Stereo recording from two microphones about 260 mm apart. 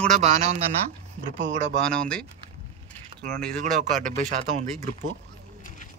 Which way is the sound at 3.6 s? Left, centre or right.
Right.